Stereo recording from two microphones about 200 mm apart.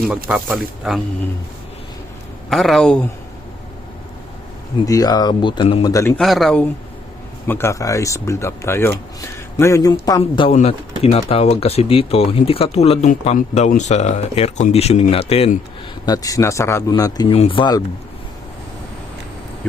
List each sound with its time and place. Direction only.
0.3 s speech: 5° right (ahead or behind)
2.5 s speech: centre (ahead or behind)
4.9 s speech: 20° left (ahead or behind)
5.9 s speech: 15° left (ahead or behind)
6.1 s speech: centre (ahead or behind); by 15.5 s 30° left (ahead or behind)
16.0 s speech: 15° left (ahead or behind)